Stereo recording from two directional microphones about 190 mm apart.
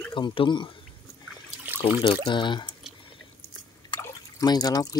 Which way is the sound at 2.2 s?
25° left (ahead or behind).